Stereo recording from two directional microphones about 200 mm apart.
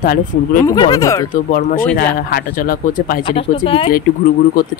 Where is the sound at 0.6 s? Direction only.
20° left (ahead or behind).